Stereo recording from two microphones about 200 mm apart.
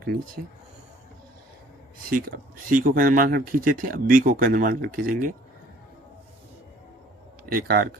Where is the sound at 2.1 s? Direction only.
45° right (ahead or behind).